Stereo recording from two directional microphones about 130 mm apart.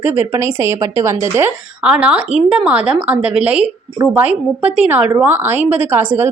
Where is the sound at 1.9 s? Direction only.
10° right (ahead or behind).